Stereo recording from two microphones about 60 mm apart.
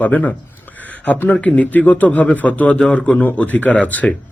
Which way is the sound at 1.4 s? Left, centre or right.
Left.